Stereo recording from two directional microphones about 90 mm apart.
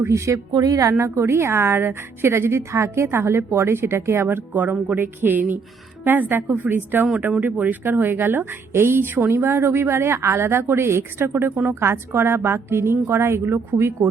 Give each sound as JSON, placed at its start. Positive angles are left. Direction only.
{"t": 0.0, "sound": "a woman's voice", "side_deg": -35}